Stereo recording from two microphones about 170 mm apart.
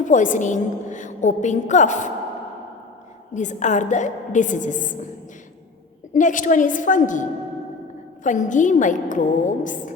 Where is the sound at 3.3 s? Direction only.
45° left (ahead or behind).